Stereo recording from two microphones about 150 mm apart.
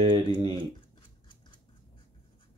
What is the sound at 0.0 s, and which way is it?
Speech, 35° right (ahead or behind).